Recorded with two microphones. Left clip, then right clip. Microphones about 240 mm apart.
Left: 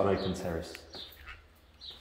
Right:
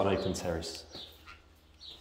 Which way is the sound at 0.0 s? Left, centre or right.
Centre.